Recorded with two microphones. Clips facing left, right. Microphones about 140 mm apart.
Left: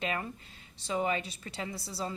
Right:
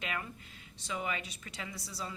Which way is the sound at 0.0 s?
35° left (ahead or behind).